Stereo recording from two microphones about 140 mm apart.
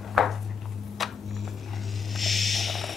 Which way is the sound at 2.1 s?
Centre (ahead or behind).